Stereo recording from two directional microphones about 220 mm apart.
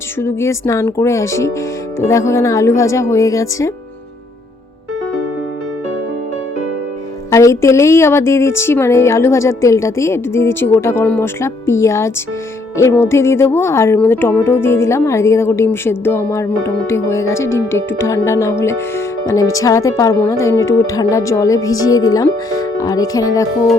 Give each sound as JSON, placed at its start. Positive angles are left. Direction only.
{"t": 0.2, "sound": "speech", "side_deg": 10}
{"t": 7.3, "sound": "speech", "side_deg": 15}